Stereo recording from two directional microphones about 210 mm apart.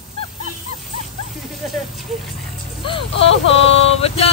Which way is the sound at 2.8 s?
25° left (ahead or behind).